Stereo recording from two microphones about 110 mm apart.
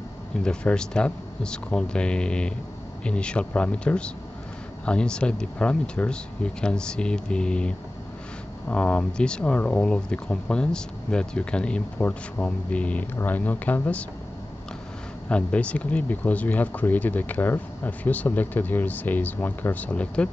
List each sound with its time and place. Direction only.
0.4 s speech: 5° left (ahead or behind)
15.2 s speech: 10° left (ahead or behind)